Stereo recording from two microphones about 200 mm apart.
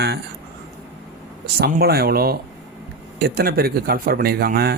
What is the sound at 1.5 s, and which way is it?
Speech, 50° right (ahead or behind).